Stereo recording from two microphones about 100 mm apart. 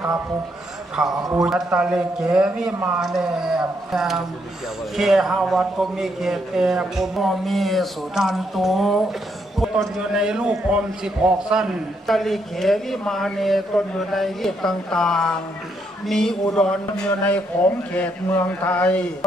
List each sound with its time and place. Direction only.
1.0 s a man's voice: 5° right (ahead or behind); by 19.0 s 15° left (ahead or behind)